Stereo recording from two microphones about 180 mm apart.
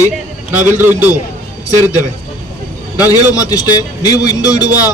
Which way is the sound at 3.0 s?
20° left (ahead or behind).